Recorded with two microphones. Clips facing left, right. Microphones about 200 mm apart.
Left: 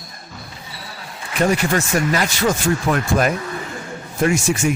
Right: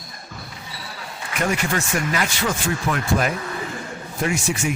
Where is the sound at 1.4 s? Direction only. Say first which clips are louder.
Left 5 dB; 35° left (ahead or behind).